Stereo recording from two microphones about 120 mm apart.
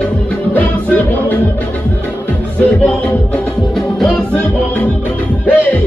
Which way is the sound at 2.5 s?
10° left (ahead or behind).